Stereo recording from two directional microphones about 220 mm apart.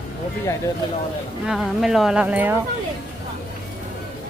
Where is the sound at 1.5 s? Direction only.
Centre (ahead or behind).